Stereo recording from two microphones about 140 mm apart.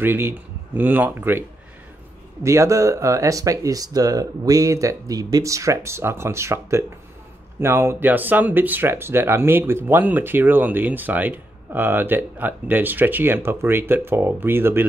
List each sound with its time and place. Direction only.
0.0 s speech: 15° right (ahead or behind)
2.4 s speech: 20° right (ahead or behind)